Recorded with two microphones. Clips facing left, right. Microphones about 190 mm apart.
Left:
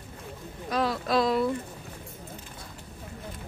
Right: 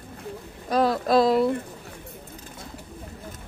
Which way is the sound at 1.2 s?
35° right (ahead or behind).